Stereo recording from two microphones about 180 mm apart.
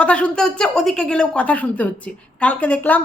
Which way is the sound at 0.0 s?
5° left (ahead or behind).